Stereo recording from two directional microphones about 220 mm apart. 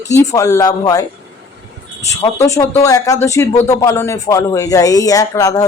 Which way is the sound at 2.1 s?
15° left (ahead or behind).